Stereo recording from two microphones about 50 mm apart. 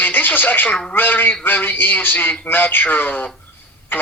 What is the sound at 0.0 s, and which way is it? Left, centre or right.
Television, left.